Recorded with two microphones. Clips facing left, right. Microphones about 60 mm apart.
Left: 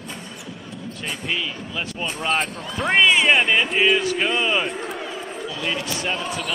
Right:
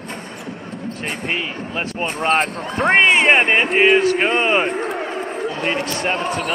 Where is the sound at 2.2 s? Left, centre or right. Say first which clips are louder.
Right 6 dB; right.